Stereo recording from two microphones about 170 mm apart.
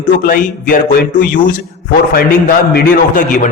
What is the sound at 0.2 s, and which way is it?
A man's voice, 50° left (ahead or behind).